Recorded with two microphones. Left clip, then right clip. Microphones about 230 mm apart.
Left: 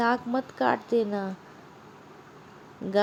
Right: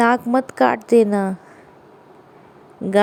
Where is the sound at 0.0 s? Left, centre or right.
Right.